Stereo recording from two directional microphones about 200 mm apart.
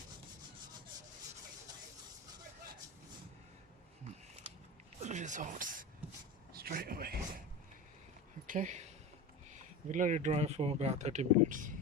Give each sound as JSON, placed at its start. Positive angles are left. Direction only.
{"t": 5.0, "sound": "a sound", "side_deg": -35}
{"t": 6.5, "sound": "a man's voice", "side_deg": -50}
{"t": 8.4, "sound": "speech", "side_deg": -40}
{"t": 9.9, "sound": "speech", "side_deg": -40}